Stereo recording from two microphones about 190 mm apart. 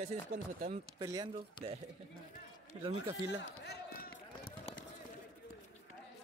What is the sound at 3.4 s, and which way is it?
Speech, 60° left (ahead or behind).